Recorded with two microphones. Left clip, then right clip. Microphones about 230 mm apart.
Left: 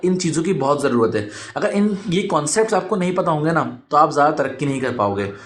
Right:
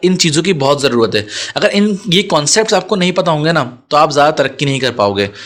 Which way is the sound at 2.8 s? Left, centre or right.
Right.